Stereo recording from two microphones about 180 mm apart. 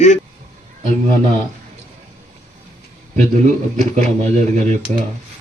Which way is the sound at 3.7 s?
40° right (ahead or behind).